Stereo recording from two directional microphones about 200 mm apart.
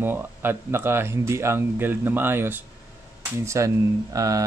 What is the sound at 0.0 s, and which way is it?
Speech, 10° right (ahead or behind).